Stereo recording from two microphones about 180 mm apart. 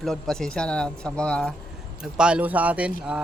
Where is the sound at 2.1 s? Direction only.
5° right (ahead or behind).